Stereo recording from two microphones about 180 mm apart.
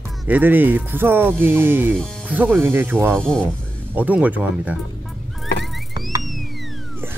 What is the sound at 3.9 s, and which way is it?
Speech, 10° right (ahead or behind).